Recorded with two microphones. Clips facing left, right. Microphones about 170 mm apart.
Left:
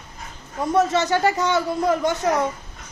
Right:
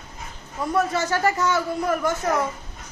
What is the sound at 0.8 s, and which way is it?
A man's voice, 20° left (ahead or behind).